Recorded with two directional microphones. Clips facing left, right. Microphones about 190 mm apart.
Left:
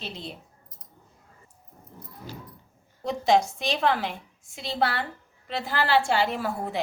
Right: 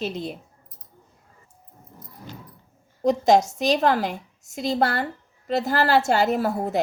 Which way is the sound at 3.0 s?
45° right (ahead or behind).